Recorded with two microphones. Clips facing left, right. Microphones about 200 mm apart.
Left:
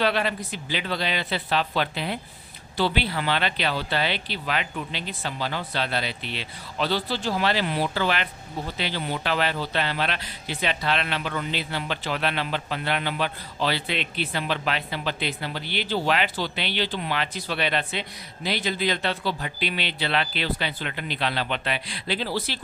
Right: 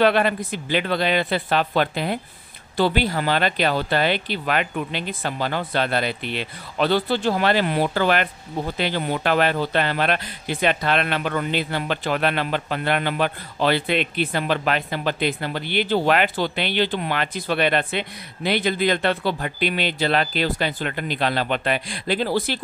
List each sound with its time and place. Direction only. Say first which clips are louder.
0.0 s speech: right 6 dB; 55° right (ahead or behind)